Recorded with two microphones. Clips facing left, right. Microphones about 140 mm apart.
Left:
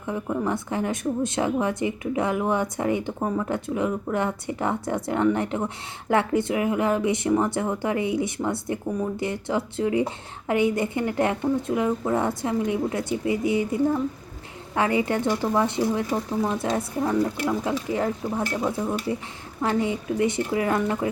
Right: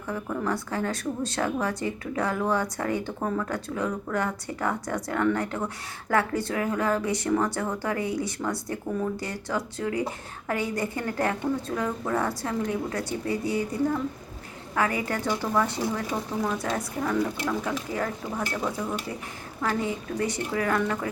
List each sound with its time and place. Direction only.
0.1 s speech: 20° left (ahead or behind)